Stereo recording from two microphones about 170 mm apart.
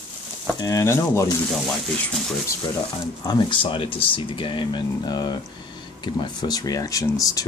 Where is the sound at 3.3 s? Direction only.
30° left (ahead or behind).